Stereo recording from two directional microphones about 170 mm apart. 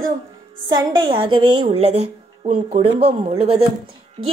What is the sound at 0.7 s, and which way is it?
A woman's voice, 25° right (ahead or behind).